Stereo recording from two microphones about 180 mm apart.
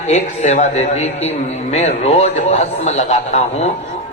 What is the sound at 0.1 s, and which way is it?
A man's voice, 40° left (ahead or behind).